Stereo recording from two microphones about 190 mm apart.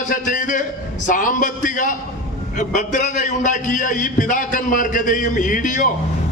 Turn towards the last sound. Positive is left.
turn(degrees=40)  # may be behind; listen again after turning